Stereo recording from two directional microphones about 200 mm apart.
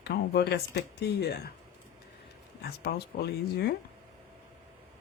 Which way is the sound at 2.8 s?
55° left (ahead or behind).